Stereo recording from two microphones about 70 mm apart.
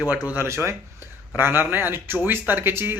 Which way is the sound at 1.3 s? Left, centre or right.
Right.